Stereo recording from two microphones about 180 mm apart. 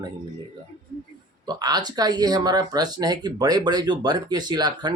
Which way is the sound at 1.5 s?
20° right (ahead or behind).